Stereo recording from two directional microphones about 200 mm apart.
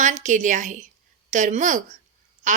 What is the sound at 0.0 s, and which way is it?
Speech, 35° right (ahead or behind).